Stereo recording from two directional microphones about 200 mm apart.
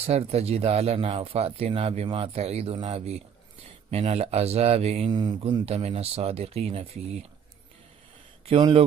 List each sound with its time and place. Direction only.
0.0 s speech: 30° right (ahead or behind)
8.5 s speech: 25° right (ahead or behind)